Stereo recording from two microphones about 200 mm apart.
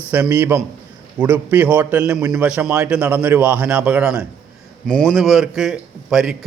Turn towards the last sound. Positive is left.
turn(degrees=0)  # may be behind; listen again after turning